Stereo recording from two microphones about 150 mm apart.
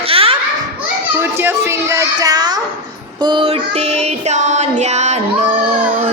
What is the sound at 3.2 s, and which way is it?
Child singing, 30° right (ahead or behind).